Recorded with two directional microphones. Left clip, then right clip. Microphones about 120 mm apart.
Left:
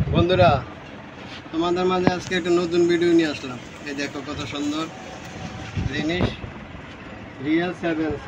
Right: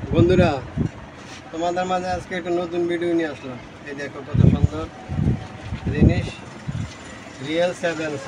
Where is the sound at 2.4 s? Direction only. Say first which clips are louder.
Left 4 dB; 10° right (ahead or behind).